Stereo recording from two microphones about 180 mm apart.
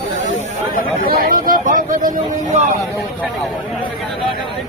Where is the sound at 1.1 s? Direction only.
50° right (ahead or behind).